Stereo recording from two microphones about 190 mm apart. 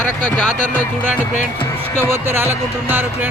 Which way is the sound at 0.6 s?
40° left (ahead or behind).